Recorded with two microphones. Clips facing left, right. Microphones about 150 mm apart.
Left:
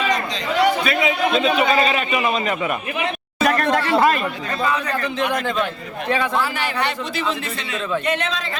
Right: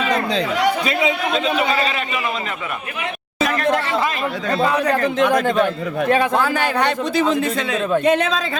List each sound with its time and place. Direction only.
3.4 s speech: 50° left (ahead or behind)
4.6 s a man's voice: 50° right (ahead or behind)